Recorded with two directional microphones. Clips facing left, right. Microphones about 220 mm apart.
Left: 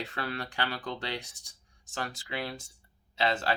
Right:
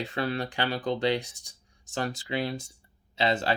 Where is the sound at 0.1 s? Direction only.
20° right (ahead or behind).